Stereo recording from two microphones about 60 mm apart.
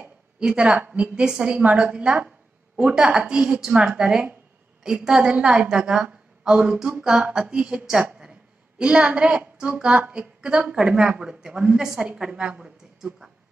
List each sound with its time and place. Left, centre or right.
0.4 s a woman's voice: centre
8.0 s a sound: centre
9.6 s speech: centre